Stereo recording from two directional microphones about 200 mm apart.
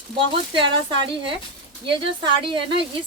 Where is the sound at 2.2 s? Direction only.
25° right (ahead or behind).